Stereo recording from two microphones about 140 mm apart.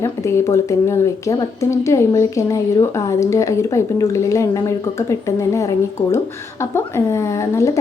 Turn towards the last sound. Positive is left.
turn(degrees=20)  # may be behind; listen again after turning